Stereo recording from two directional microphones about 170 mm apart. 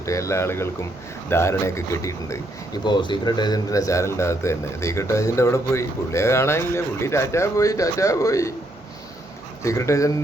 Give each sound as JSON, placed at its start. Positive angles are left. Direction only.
{"t": 0.0, "sound": "speech", "side_deg": 15}
{"t": 9.6, "sound": "speech", "side_deg": 15}